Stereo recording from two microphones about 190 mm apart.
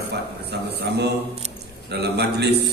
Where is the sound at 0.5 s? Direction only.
65° right (ahead or behind).